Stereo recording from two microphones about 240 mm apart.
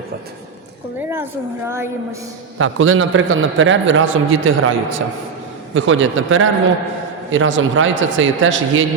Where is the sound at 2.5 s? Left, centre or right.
Right.